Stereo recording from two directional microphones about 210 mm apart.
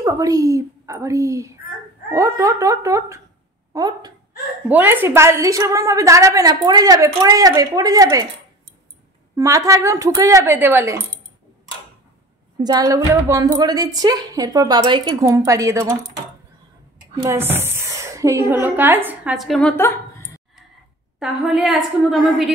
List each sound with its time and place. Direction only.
0.0 s a woman's voice: 15° right (ahead or behind)
4.6 s a woman's voice: 10° right (ahead or behind)
9.4 s a woman's voice: 15° right (ahead or behind)
12.5 s a woman's voice: 20° right (ahead or behind)
17.2 s a woman's voice: 10° right (ahead or behind); by 20.4 s 10° left (ahead or behind)
21.2 s a woman's voice: centre (ahead or behind)